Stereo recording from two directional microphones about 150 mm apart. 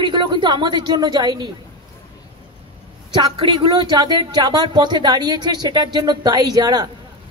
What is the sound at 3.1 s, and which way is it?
Speech, 35° right (ahead or behind).